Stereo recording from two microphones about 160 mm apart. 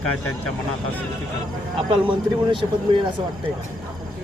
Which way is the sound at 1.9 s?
30° right (ahead or behind).